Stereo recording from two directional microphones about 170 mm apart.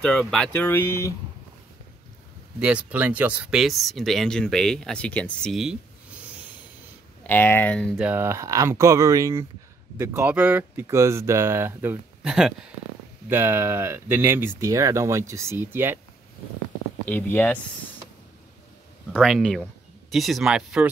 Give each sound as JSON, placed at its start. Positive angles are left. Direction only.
{"t": 0.0, "sound": "speech", "side_deg": 5}
{"t": 2.6, "sound": "speech", "side_deg": -10}
{"t": 7.2, "sound": "speech", "side_deg": 10}
{"t": 8.0, "sound": "speech", "side_deg": -15}
{"t": 13.3, "sound": "speech", "side_deg": -15}
{"t": 17.1, "sound": "speech", "side_deg": 10}
{"t": 19.1, "sound": "speech", "side_deg": 0}